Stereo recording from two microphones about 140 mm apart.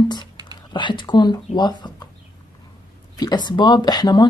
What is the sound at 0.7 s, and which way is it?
Speech, 35° left (ahead or behind).